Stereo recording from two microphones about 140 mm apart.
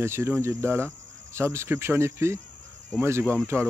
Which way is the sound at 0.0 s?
20° right (ahead or behind).